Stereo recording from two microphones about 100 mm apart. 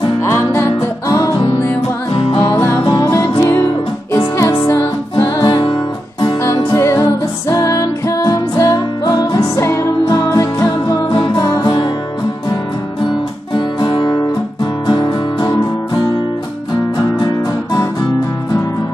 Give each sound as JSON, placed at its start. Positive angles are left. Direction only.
{"t": 0.2, "sound": "music", "side_deg": 25}
{"t": 2.5, "sound": "music", "side_deg": 20}
{"t": 5.1, "sound": "music", "side_deg": 50}
{"t": 6.7, "sound": "music", "side_deg": 30}
{"t": 13.6, "sound": "music", "side_deg": 50}